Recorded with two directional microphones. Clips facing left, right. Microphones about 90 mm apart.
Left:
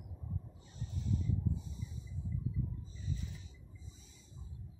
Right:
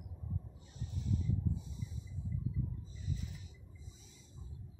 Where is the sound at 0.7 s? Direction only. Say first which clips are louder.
Even; 5° right (ahead or behind).